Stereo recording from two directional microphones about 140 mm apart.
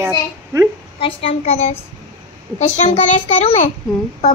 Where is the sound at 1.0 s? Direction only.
45° left (ahead or behind).